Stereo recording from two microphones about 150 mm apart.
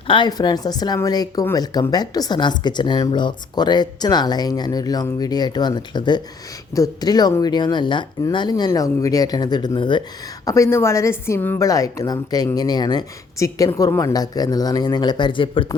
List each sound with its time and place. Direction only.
0.1 s speech: 30° left (ahead or behind)
10.4 s speech: 20° left (ahead or behind)